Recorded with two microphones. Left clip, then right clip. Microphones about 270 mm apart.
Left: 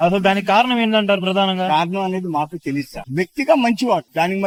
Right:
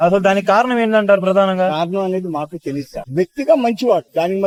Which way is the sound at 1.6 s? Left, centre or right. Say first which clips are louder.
Even; left.